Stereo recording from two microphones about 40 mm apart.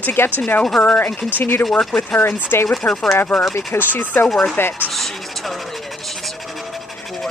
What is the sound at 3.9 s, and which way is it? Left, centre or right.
Speech, left.